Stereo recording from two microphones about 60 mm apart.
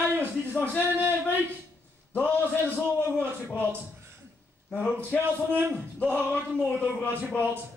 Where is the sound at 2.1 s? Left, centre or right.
Left.